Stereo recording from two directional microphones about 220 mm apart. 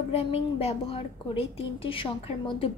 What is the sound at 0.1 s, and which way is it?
A woman's voice, 30° left (ahead or behind).